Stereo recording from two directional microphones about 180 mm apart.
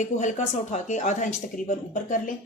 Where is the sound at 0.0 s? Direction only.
40° left (ahead or behind).